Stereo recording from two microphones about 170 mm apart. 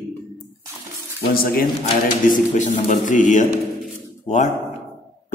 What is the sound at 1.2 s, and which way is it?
Speech, 65° left (ahead or behind).